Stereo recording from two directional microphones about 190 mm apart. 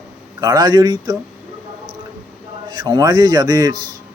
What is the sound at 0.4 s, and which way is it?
Speech, 20° right (ahead or behind).